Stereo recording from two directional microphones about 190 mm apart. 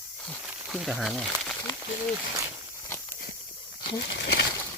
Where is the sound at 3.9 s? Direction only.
65° left (ahead or behind).